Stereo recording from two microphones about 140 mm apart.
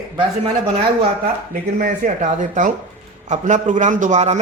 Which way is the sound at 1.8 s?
60° right (ahead or behind).